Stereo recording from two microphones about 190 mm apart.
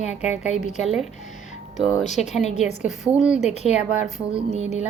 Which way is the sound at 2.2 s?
35° left (ahead or behind).